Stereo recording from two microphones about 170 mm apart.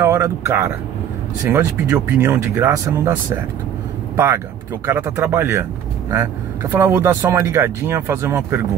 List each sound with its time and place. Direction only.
0.0 s speech: 15° right (ahead or behind)
4.8 s speech: 15° right (ahead or behind)